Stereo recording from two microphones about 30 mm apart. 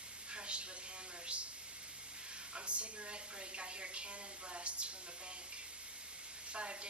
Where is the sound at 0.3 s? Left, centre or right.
Right.